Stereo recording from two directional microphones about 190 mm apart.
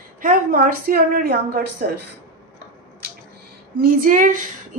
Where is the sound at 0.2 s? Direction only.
45° right (ahead or behind).